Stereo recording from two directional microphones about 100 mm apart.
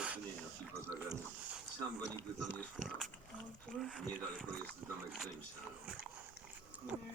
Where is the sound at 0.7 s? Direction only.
30° right (ahead or behind).